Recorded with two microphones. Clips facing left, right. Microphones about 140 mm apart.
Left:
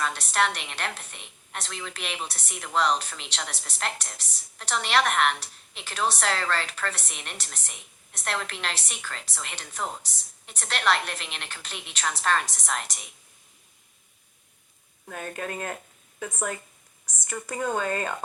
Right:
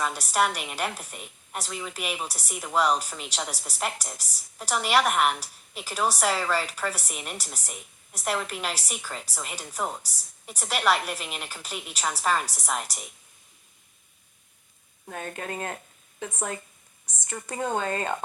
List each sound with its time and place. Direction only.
0.0 s a woman's voice: 10° right (ahead or behind)
15.0 s speech: 25° right (ahead or behind)